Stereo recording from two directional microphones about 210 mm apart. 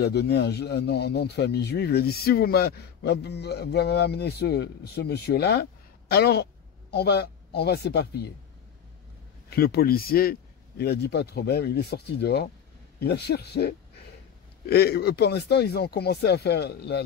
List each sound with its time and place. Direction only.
0.0 s speech: 50° left (ahead or behind)
9.5 s speech: 50° left (ahead or behind)